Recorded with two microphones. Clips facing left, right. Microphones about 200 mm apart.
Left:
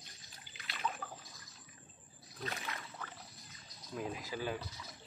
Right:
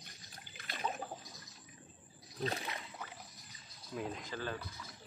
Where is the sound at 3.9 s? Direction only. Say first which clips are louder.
Left 1 dB; centre (ahead or behind).